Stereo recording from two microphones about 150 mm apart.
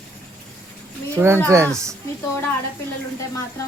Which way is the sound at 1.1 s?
15° right (ahead or behind).